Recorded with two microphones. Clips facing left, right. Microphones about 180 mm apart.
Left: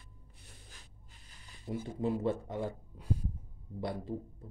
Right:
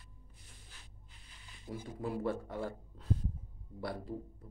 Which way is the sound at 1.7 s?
25° left (ahead or behind).